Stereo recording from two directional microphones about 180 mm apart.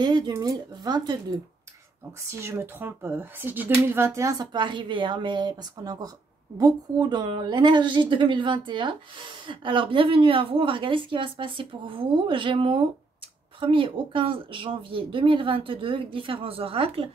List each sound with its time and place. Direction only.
0.0 s a woman's voice: 25° right (ahead or behind)